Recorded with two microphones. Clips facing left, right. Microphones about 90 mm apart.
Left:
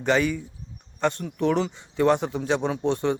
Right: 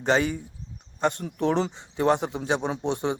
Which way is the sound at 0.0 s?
25° right (ahead or behind).